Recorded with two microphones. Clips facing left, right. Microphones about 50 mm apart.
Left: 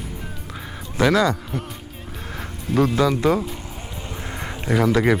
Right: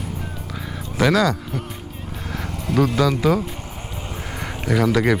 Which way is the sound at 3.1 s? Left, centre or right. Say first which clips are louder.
Even; centre.